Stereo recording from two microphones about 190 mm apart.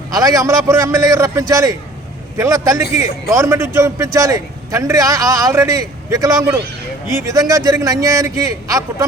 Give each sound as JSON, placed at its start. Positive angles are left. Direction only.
{"t": 0.1, "sound": "a man's voice", "side_deg": -15}